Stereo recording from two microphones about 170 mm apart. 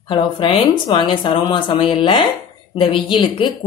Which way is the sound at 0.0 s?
30° left (ahead or behind).